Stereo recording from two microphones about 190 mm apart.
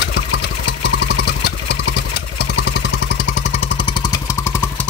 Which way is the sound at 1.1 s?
60° left (ahead or behind).